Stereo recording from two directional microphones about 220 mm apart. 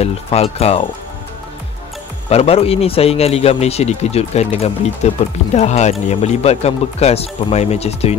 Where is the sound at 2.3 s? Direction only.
25° left (ahead or behind).